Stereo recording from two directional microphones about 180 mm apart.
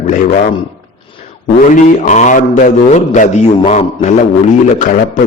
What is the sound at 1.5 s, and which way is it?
A man's voice, 45° left (ahead or behind).